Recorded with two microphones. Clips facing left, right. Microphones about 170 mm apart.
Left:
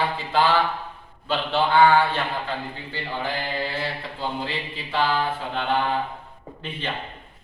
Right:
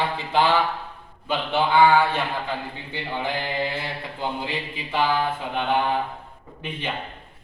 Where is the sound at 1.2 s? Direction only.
15° right (ahead or behind).